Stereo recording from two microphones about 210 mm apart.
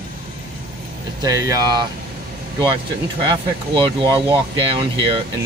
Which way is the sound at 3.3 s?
20° right (ahead or behind).